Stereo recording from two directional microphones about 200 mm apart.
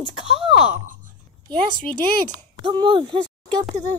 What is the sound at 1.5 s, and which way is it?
Speech, 5° left (ahead or behind).